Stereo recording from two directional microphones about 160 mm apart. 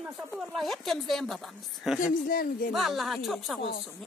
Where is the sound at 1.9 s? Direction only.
60° left (ahead or behind).